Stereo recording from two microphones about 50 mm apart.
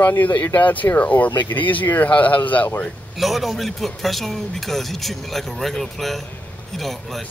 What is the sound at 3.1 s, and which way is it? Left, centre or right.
Speech, centre.